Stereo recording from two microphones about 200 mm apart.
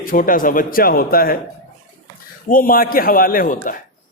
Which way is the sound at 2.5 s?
45° left (ahead or behind).